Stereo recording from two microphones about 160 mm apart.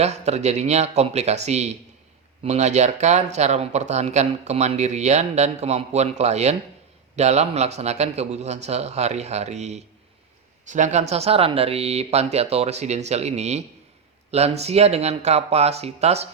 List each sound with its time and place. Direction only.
0.0 s speech: 45° right (ahead or behind)